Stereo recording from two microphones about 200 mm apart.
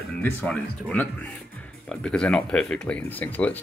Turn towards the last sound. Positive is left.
turn(degrees=10)  # may be behind; listen again after turning